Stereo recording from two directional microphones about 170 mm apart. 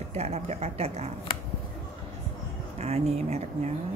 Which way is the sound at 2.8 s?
40° right (ahead or behind).